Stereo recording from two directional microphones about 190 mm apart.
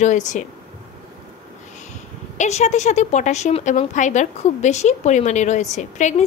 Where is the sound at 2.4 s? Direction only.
35° left (ahead or behind).